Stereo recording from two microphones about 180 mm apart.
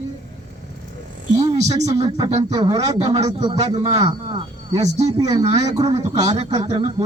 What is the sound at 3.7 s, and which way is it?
Speech, 20° right (ahead or behind).